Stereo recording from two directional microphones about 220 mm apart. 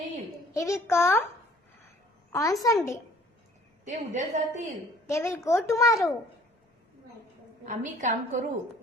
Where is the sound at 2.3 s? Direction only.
15° left (ahead or behind).